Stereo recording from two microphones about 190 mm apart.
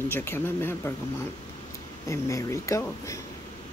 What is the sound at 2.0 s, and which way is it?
Speech, 15° left (ahead or behind).